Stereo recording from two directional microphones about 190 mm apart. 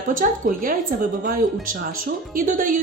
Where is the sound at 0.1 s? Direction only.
45° right (ahead or behind).